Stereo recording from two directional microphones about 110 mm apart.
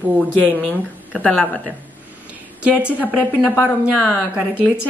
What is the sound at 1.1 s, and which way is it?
Speech, 10° left (ahead or behind).